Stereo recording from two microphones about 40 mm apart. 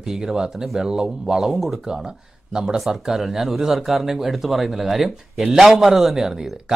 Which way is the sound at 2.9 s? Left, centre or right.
Centre.